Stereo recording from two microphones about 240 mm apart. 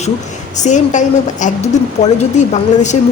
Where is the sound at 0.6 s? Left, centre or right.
Left.